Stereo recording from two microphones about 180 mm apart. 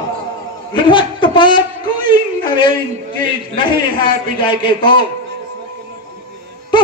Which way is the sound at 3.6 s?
25° left (ahead or behind).